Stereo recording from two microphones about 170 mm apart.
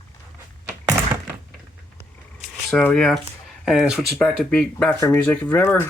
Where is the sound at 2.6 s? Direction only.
5° left (ahead or behind).